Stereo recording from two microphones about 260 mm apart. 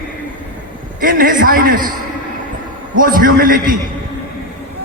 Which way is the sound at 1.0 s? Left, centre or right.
Right.